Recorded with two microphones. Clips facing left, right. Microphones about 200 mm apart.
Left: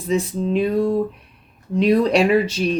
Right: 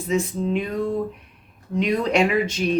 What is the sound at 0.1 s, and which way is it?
Speech, 35° left (ahead or behind).